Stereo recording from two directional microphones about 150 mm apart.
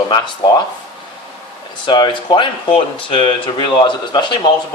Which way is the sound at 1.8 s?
30° left (ahead or behind).